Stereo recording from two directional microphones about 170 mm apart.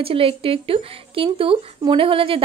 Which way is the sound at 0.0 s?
35° right (ahead or behind).